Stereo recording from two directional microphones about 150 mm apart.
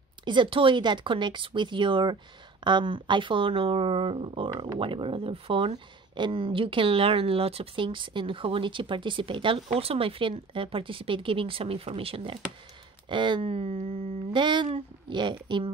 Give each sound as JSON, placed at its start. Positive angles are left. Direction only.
{"t": 0.2, "sound": "speech", "side_deg": -30}